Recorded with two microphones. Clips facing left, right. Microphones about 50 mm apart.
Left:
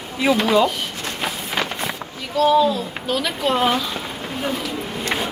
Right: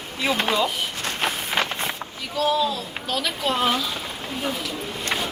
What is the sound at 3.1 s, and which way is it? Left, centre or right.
Speech, centre.